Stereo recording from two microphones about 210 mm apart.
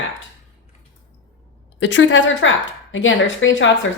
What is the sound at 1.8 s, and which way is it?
Speech, 65° left (ahead or behind).